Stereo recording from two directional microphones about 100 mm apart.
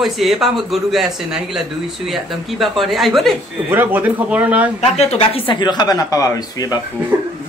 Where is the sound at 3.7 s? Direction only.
20° right (ahead or behind).